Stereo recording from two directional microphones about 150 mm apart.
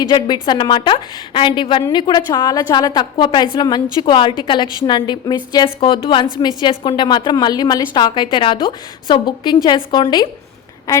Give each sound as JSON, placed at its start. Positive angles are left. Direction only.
{"t": 0.4, "sound": "a woman's voice", "side_deg": 30}